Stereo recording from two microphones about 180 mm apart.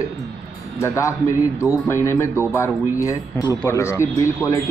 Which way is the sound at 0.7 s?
15° left (ahead or behind).